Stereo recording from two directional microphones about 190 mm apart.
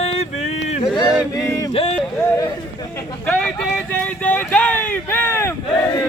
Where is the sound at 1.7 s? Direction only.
30° left (ahead or behind).